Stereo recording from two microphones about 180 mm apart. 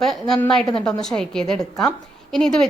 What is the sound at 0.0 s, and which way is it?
A woman's voice, centre (ahead or behind).